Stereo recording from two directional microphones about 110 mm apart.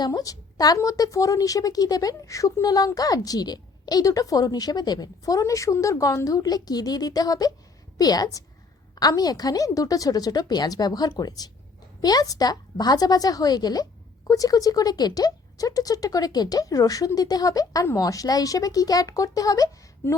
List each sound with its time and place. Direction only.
0.0 s a woman's voice: 30° left (ahead or behind)